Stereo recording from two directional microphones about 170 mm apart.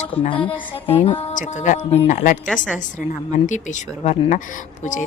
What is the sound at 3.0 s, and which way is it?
Speech, 45° left (ahead or behind).